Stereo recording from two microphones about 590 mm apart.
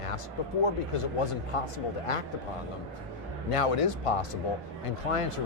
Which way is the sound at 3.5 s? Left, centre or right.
Left.